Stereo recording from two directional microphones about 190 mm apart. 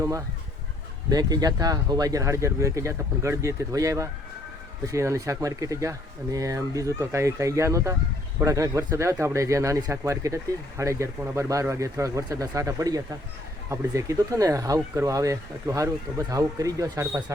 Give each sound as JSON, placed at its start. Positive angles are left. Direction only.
{"t": 0.0, "sound": "fowl", "side_deg": -15}
{"t": 1.1, "sound": "speech", "side_deg": -20}